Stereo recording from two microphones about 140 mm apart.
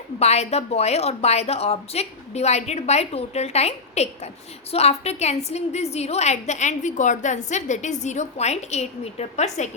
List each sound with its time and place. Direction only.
0.2 s a woman's voice: 50° left (ahead or behind)